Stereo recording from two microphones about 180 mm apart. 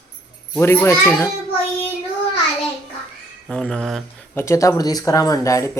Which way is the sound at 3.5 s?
5° left (ahead or behind).